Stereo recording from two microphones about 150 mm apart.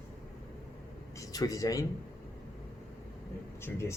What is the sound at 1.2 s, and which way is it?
Speech, 25° left (ahead or behind).